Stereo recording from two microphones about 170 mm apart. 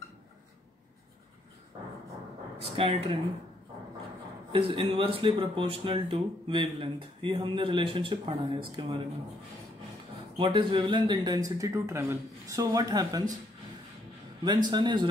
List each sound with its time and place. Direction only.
2.6 s speech: 30° right (ahead or behind)
4.5 s speech: 30° right (ahead or behind)
10.3 s speech: 30° right (ahead or behind)
14.7 s speech: 25° right (ahead or behind)